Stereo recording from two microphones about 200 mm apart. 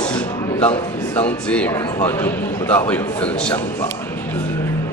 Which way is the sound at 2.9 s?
5° left (ahead or behind).